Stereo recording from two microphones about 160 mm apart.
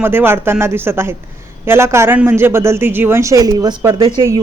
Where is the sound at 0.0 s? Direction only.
15° right (ahead or behind).